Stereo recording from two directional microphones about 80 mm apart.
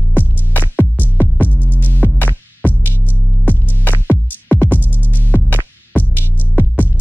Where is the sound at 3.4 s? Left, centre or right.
Left.